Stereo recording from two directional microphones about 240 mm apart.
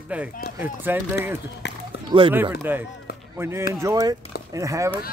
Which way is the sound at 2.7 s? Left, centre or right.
Centre.